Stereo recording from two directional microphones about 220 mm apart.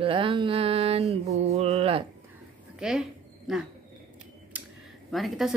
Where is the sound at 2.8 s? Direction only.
Centre (ahead or behind).